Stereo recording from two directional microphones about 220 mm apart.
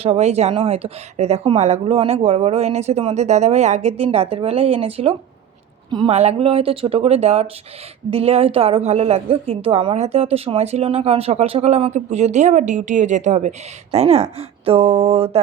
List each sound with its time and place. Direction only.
0.0 s a woman's voice: 30° right (ahead or behind)